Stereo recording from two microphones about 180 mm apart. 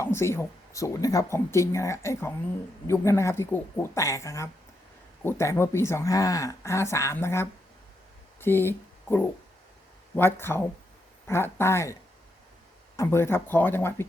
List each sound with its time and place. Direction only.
0.0 s speech: 15° left (ahead or behind)
13.0 s speech: 15° left (ahead or behind)